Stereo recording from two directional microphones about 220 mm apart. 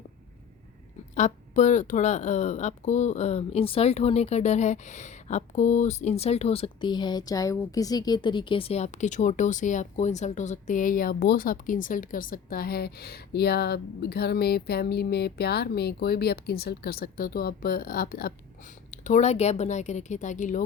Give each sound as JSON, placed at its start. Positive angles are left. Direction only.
{"t": 1.1, "sound": "speech", "side_deg": 35}